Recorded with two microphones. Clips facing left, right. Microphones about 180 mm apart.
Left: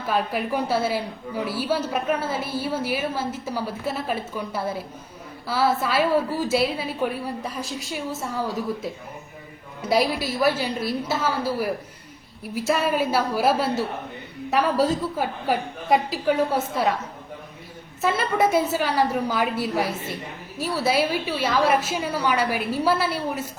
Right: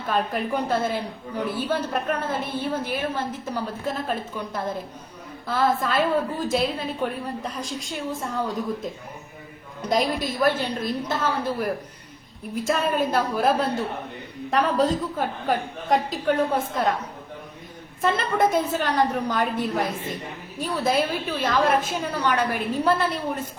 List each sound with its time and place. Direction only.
0.1 s a woman's voice: 10° left (ahead or behind)
18.0 s a woman's voice: 5° left (ahead or behind)